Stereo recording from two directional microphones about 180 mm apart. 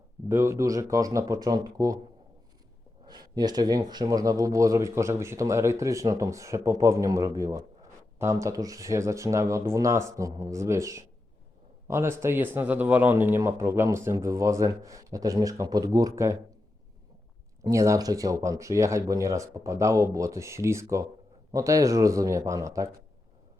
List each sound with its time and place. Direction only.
0.3 s speech: 15° right (ahead or behind)
3.1 s speech: 20° right (ahead or behind)
17.7 s speech: 15° right (ahead or behind)